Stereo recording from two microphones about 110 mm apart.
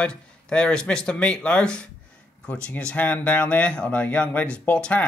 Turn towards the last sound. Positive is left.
turn(degrees=10)  # may be behind; listen again after turning